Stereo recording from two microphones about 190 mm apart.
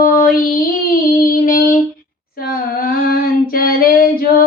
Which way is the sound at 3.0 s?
50° left (ahead or behind).